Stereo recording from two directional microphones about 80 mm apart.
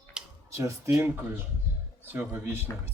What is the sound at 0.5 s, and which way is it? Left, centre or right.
Speech, right.